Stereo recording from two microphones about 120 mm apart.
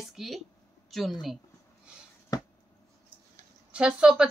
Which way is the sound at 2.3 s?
30° left (ahead or behind).